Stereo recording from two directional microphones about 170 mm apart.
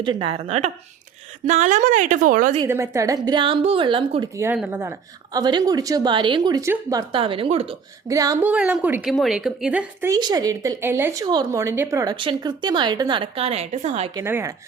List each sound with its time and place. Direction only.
0.0 s a woman's voice: 30° right (ahead or behind); by 2.6 s 50° right (ahead or behind)
2.6 s speech: 15° right (ahead or behind)
4.5 s a woman's voice: 5° right (ahead or behind)
4.8 s speech: 20° right (ahead or behind)
7.1 s a woman's voice: 30° right (ahead or behind)
8.0 s speech: 20° right (ahead or behind)
8.4 s a woman's voice: 5° right (ahead or behind)
10.1 s speech: 25° right (ahead or behind); by 14.1 s 40° right (ahead or behind)
14.2 s speech: 15° right (ahead or behind)